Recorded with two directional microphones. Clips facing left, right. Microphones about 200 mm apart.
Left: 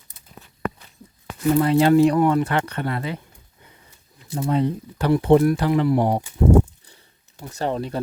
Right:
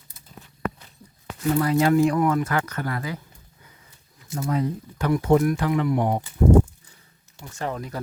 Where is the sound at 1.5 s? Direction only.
25° left (ahead or behind).